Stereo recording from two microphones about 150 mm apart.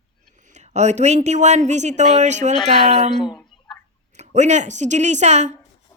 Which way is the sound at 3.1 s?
30° left (ahead or behind).